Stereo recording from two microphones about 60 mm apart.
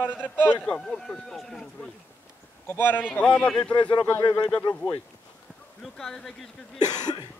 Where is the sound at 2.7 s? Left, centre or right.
Left.